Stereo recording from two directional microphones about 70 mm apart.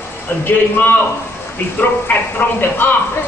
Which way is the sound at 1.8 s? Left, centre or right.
Left.